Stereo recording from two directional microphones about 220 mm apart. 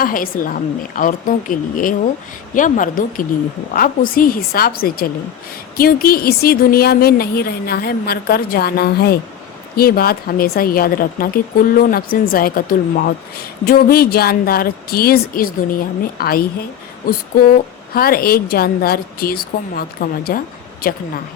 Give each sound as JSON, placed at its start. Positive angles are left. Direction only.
{"t": 0.0, "sound": "a woman's voice", "side_deg": 40}
{"t": 13.7, "sound": "a woman's voice", "side_deg": 40}